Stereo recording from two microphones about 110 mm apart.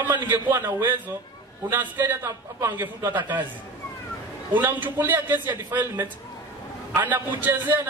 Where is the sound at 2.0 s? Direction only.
25° right (ahead or behind).